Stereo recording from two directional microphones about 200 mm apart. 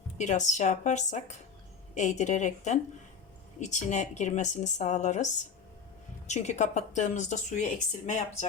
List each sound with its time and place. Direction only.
0.2 s a woman's voice: 35° left (ahead or behind)